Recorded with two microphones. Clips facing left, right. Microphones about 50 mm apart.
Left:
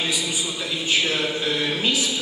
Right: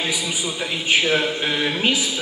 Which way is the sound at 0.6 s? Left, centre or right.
Right.